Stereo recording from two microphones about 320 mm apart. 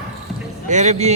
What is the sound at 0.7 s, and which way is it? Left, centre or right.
Speech, right.